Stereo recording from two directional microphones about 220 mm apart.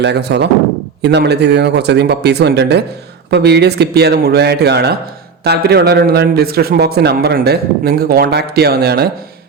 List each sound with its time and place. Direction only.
0.0 s a man's voice: 50° right (ahead or behind)